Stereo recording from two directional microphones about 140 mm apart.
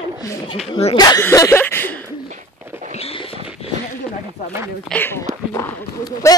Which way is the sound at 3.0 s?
45° left (ahead or behind).